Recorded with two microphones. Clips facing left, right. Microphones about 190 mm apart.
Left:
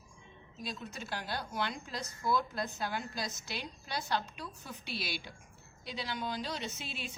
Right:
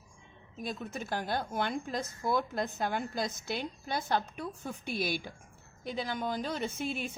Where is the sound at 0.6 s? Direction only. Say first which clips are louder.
Right 5 dB; 50° right (ahead or behind).